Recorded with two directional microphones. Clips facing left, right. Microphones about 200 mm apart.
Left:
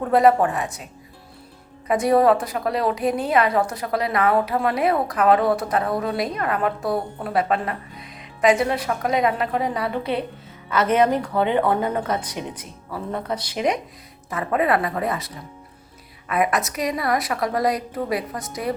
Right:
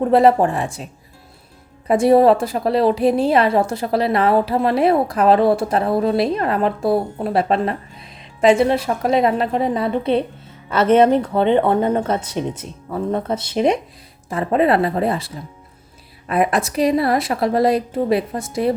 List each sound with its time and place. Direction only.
0.0 s a woman's voice: 30° right (ahead or behind)
1.9 s a woman's voice: 30° right (ahead or behind)